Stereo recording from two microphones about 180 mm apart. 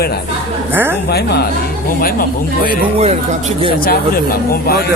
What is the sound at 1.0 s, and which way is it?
Speech, 65° left (ahead or behind).